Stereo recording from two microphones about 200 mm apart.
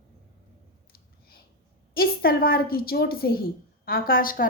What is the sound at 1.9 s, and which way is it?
Speech, 50° left (ahead or behind).